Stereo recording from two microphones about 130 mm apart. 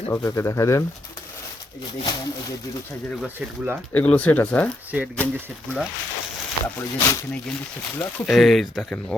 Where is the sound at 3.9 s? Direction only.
10° left (ahead or behind).